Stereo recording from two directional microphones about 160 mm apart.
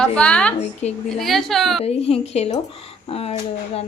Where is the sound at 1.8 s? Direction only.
40° left (ahead or behind).